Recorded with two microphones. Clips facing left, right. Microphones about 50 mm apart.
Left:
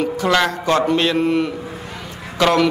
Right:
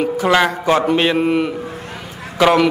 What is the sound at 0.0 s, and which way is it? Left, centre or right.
Speech, centre.